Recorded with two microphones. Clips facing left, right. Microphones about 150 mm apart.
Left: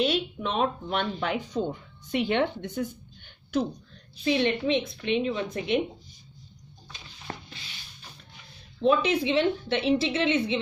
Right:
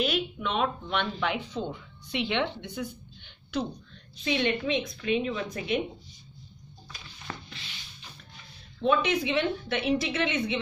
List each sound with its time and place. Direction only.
0.0 s speech: 30° left (ahead or behind)
4.2 s a woman's voice: 30° left (ahead or behind)
7.3 s rub: 35° left (ahead or behind)
8.8 s a woman's voice: 30° left (ahead or behind)